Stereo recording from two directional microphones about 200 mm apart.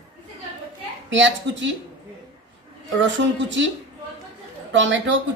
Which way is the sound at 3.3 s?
65° right (ahead or behind).